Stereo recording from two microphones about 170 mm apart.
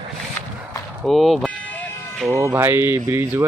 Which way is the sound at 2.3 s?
20° right (ahead or behind).